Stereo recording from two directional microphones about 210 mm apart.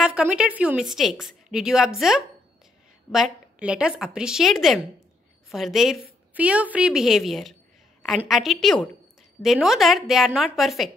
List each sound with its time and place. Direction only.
0.0 s a woman's voice: 5° right (ahead or behind)